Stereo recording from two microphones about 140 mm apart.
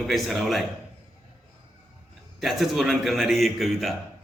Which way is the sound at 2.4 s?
Centre (ahead or behind).